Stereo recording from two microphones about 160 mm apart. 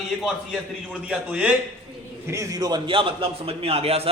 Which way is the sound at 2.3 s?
20° right (ahead or behind).